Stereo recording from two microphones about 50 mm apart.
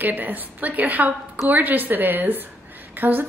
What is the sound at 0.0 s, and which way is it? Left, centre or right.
A woman's voice, right.